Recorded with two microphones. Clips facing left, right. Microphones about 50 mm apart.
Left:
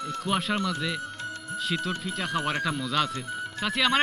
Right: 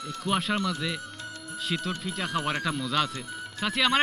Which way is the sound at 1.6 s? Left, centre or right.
Centre.